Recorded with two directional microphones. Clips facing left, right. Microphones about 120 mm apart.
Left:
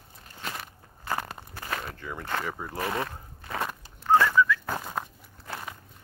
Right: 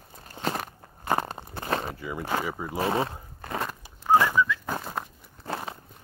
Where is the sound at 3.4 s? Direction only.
45° right (ahead or behind).